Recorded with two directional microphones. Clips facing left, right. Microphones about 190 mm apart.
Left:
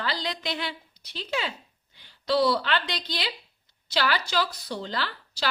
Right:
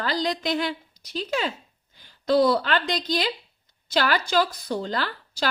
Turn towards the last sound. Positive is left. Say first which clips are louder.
# right 4 dB
turn(degrees=-45)  # may be behind; listen again after turning